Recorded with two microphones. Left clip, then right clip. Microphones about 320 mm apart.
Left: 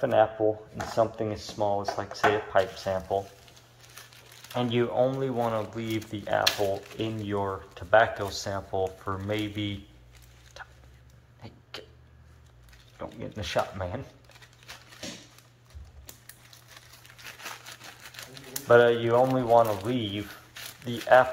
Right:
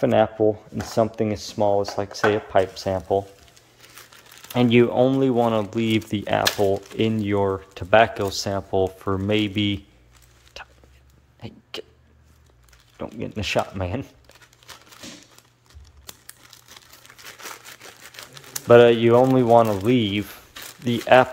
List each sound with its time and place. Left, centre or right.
0.0 s speech: right
4.5 s speech: right
10.6 s a sound: right
11.4 s speech: right
13.0 s speech: right
17.0 s crumpling: centre
18.1 s typewriter: centre
18.7 s speech: right